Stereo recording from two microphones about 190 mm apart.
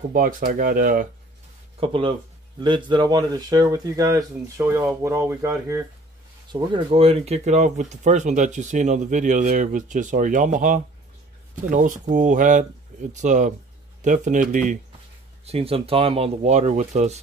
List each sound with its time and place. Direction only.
0.1 s speech: 50° right (ahead or behind)
1.8 s speech: 25° right (ahead or behind)
6.5 s speech: 25° right (ahead or behind); by 14.8 s 45° right (ahead or behind)
15.4 s speech: 30° right (ahead or behind)